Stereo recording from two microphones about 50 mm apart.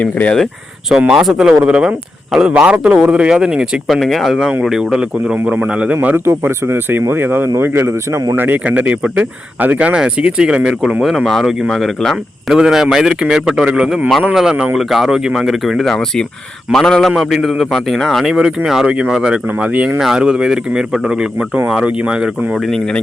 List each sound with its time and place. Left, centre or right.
0.0 s speech: left
1.0 s a man's voice: centre
3.8 s a man's voice: centre
4.3 s a man's voice: centre
4.9 s a man's voice: right
6.1 s speech: right
8.6 s speech: right; by 10.9 s centre
11.0 s a man's voice: centre
12.5 s a man's voice: centre
15.8 s speech: centre
17.1 s a man's voice: centre
18.3 s a man's voice: centre
18.9 s speech: right
20.0 s a man's voice: centre